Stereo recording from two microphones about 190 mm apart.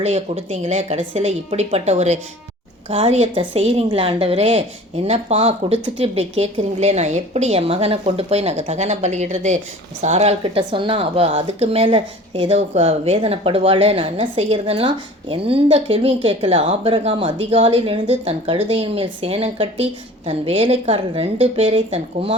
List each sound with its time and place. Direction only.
0.0 s a woman's voice: 35° right (ahead or behind)